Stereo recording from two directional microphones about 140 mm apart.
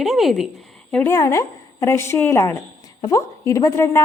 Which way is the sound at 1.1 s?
20° left (ahead or behind).